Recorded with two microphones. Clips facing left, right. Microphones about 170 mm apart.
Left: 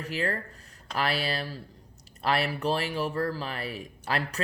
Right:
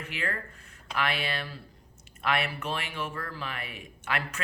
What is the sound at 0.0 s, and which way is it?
Speech, 35° left (ahead or behind).